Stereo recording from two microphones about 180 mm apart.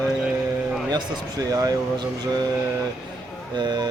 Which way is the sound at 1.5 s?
20° right (ahead or behind).